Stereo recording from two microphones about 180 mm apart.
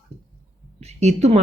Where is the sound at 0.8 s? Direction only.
40° right (ahead or behind).